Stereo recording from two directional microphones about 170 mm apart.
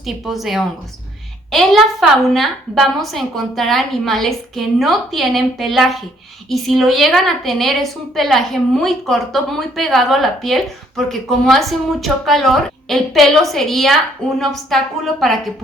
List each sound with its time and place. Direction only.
0.0 s a woman's voice: centre (ahead or behind)